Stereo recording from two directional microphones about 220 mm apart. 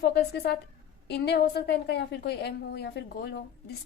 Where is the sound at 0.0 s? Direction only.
45° left (ahead or behind).